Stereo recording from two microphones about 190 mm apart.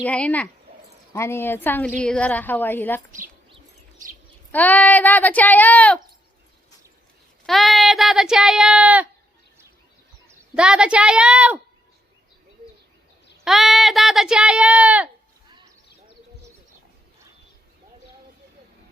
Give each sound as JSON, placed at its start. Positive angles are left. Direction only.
{"t": 0.0, "sound": "speech", "side_deg": 10}
{"t": 4.5, "sound": "speech", "side_deg": 10}
{"t": 7.4, "sound": "speech", "side_deg": 0}
{"t": 10.2, "sound": "speech", "side_deg": -5}
{"t": 13.4, "sound": "speech", "side_deg": 0}